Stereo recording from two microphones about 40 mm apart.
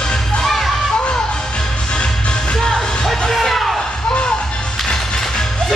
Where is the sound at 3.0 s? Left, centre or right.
Centre.